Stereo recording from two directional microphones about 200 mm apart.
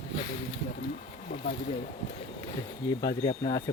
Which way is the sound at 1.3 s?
35° left (ahead or behind).